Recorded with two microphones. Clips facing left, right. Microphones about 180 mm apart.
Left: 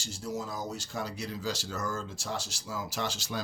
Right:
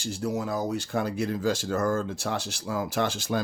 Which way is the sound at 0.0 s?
60° right (ahead or behind).